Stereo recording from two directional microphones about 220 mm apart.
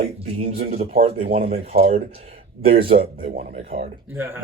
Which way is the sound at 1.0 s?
25° right (ahead or behind).